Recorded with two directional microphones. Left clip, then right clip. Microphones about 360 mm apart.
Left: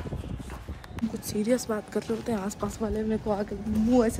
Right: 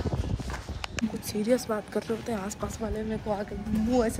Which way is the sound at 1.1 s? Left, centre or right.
Centre.